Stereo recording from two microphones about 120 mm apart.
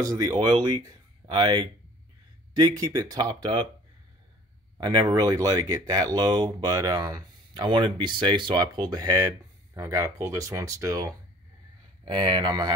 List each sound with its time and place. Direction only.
0.0 s speech: 30° right (ahead or behind)
4.7 s speech: 35° right (ahead or behind)
9.8 s speech: 25° right (ahead or behind)
12.0 s speech: 40° right (ahead or behind)